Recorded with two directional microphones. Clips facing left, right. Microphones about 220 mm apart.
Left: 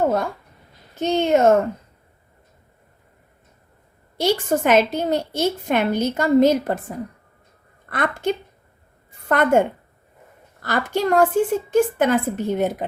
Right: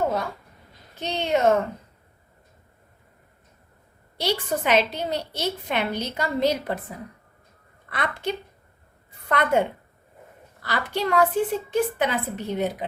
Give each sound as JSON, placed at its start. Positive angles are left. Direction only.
{"t": 0.9, "sound": "a woman's voice", "side_deg": 45}
{"t": 4.2, "sound": "a woman's voice", "side_deg": 50}